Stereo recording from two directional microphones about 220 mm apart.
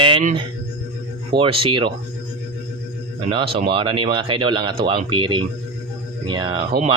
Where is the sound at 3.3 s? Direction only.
20° right (ahead or behind).